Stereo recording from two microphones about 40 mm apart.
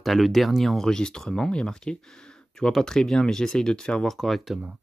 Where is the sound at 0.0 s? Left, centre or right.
Centre.